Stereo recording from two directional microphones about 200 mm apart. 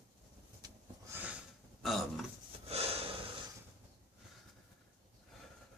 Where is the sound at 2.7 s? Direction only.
30° right (ahead or behind).